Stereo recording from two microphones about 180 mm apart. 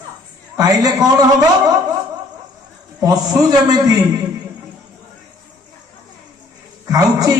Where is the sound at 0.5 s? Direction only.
20° right (ahead or behind).